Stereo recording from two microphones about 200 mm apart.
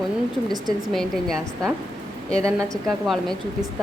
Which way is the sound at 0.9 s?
Centre (ahead or behind).